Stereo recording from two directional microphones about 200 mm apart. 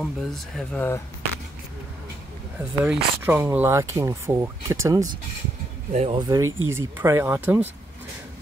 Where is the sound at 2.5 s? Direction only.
10° right (ahead or behind).